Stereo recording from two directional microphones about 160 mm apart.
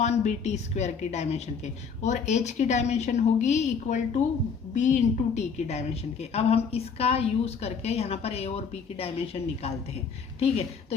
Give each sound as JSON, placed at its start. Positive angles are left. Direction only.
{"t": 0.0, "sound": "a woman's voice", "side_deg": 45}